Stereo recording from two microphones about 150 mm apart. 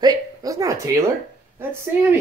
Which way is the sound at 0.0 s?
25° right (ahead or behind).